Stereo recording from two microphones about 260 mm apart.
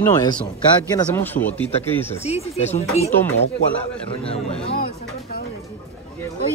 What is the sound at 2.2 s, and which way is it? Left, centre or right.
Speech, left.